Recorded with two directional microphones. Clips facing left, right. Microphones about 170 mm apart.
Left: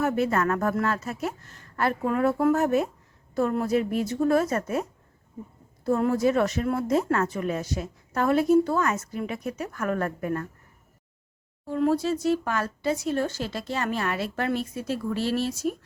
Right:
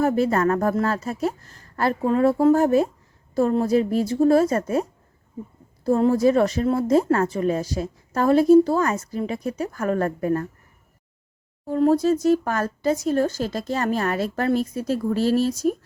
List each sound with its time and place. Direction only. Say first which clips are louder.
0.0 s a woman's voice: right 4 dB; 35° right (ahead or behind)
11.6 s a woman's voice: right 5 dB; 40° right (ahead or behind)